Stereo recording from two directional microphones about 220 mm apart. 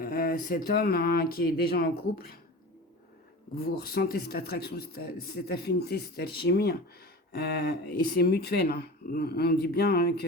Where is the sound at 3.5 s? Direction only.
45° left (ahead or behind).